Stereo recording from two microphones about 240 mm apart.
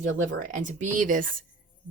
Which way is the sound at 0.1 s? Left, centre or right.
Right.